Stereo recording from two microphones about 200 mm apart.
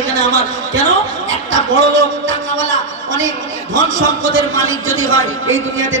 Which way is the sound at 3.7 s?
70° right (ahead or behind).